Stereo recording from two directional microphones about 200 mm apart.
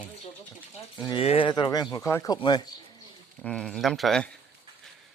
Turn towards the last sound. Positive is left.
turn(degrees=0)  # may be behind; listen again after turning